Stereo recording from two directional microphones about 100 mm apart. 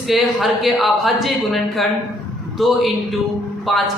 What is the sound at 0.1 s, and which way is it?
A woman's voice, centre (ahead or behind).